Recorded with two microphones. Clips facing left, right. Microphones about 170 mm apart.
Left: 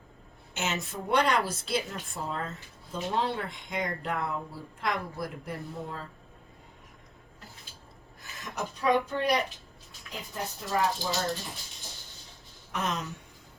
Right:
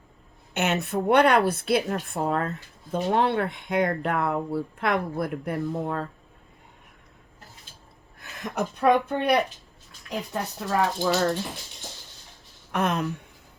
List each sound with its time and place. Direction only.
0.5 s a woman's voice: 60° right (ahead or behind)
8.2 s a woman's voice: 55° right (ahead or behind)
12.7 s a woman's voice: 60° right (ahead or behind)